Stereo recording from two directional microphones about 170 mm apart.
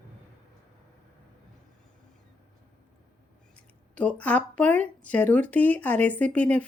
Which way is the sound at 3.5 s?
10° left (ahead or behind).